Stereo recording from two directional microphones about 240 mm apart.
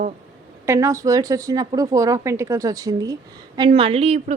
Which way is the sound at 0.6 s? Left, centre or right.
Centre.